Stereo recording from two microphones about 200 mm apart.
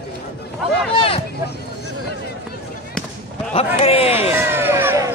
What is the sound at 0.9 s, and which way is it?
Speech, 30° left (ahead or behind).